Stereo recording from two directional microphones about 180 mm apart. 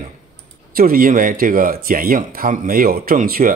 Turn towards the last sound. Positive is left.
turn(degrees=-50)  # may be behind; listen again after turning